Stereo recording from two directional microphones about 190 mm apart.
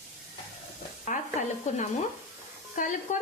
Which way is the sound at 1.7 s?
40° left (ahead or behind).